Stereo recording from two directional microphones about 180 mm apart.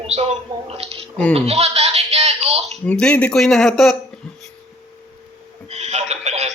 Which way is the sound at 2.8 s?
5° left (ahead or behind).